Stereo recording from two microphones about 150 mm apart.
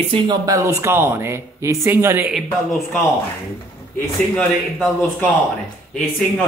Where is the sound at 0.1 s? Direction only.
30° right (ahead or behind).